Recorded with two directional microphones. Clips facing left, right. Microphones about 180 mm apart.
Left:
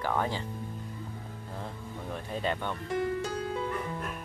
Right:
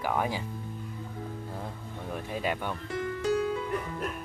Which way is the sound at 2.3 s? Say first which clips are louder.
Even; 10° right (ahead or behind).